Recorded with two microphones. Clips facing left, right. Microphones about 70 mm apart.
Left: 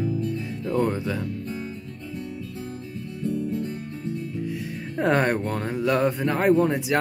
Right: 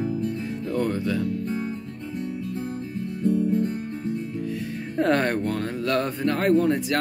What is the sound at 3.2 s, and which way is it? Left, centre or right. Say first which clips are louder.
Guitar: right 5 dB; right.